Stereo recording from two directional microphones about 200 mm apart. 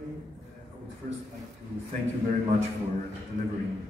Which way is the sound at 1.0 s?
45° right (ahead or behind).